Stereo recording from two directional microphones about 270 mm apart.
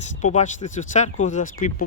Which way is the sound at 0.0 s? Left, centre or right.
Left.